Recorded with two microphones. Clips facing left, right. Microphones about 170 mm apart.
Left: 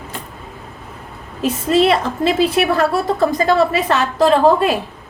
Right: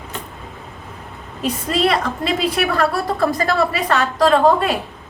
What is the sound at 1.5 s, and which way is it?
A woman's voice, 25° left (ahead or behind).